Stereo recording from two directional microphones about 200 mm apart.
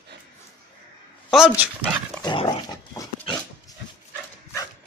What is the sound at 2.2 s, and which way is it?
Dog, 25° left (ahead or behind).